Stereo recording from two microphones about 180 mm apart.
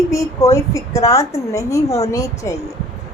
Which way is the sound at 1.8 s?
35° left (ahead or behind).